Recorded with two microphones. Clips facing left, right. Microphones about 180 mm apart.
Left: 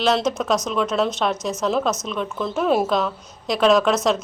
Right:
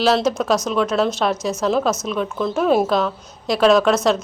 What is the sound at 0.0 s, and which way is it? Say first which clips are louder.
A woman's voice: right 3 dB; 5° right (ahead or behind).